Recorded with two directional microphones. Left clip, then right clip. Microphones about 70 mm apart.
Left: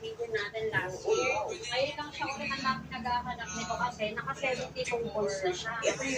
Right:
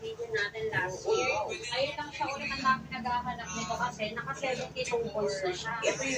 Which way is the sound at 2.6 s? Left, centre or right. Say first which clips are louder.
Right 6 dB; centre.